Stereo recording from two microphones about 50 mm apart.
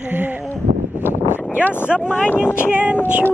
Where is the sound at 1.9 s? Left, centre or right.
Centre.